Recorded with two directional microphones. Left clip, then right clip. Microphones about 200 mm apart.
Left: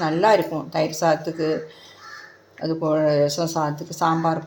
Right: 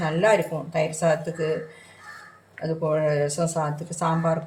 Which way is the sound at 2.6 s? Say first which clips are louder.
Left 3 dB; 25° left (ahead or behind).